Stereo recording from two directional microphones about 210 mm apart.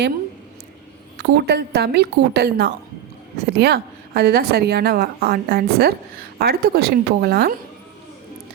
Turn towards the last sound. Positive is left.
turn(degrees=-50)  # may be behind; listen again after turning